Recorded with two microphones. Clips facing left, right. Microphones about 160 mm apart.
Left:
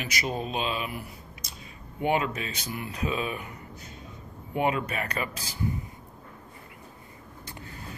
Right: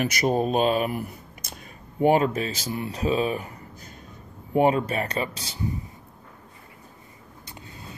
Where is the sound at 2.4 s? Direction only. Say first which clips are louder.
Right 5 dB; 30° right (ahead or behind).